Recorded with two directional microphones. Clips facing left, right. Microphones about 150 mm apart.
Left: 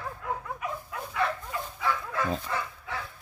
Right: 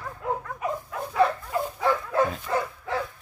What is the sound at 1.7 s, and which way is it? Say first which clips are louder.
Dog: right 6 dB; 45° right (ahead or behind).